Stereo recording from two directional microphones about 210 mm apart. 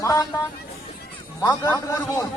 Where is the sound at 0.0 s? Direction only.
15° left (ahead or behind).